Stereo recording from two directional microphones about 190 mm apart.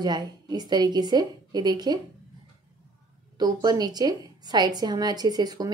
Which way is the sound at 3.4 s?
20° right (ahead or behind).